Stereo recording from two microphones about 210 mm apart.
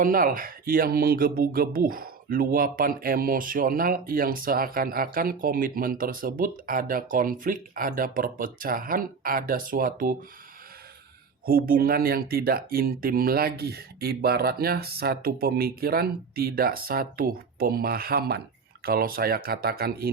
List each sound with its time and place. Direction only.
0.0 s speech: 40° right (ahead or behind)
11.4 s speech: 45° right (ahead or behind)